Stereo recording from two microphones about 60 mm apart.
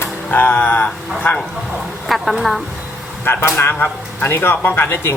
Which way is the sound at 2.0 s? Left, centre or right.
Centre.